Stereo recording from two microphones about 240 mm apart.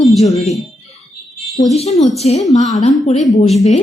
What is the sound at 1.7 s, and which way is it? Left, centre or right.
A woman's voice, left.